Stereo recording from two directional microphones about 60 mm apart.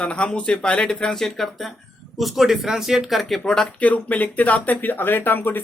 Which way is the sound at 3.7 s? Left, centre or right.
Left.